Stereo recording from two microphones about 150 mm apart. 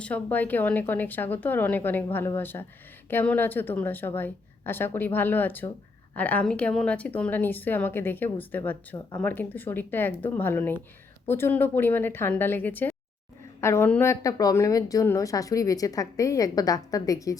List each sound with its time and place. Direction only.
0.0 s a woman's voice: 10° left (ahead or behind)